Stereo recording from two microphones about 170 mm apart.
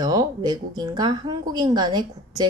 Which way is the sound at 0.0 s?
20° right (ahead or behind).